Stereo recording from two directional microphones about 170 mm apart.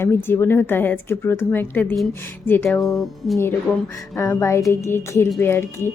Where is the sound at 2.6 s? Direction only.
Centre (ahead or behind).